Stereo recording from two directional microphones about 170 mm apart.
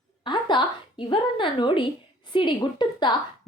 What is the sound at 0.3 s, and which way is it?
A woman's voice, 25° left (ahead or behind).